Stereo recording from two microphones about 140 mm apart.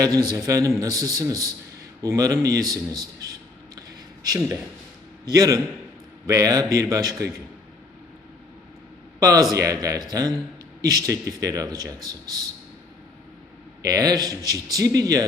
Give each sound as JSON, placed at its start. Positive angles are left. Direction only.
{"t": 0.0, "sound": "a man's voice", "side_deg": -25}
{"t": 3.8, "sound": "a sound", "side_deg": -25}
{"t": 5.3, "sound": "a man's voice", "side_deg": -25}
{"t": 9.2, "sound": "a man's voice", "side_deg": -25}
{"t": 13.8, "sound": "a man's voice", "side_deg": -25}